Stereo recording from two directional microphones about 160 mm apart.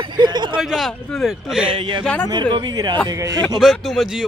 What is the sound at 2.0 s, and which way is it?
Speech, 10° left (ahead or behind).